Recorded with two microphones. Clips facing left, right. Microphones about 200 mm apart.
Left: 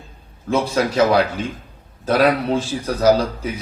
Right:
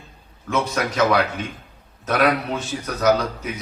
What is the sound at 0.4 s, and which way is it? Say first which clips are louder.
A man's voice: left 4 dB; 30° left (ahead or behind).